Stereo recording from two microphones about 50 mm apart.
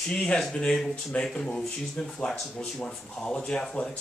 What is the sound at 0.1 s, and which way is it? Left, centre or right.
Speech, centre.